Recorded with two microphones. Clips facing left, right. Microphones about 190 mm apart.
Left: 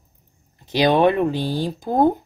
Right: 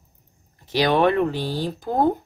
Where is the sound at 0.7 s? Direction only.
15° left (ahead or behind).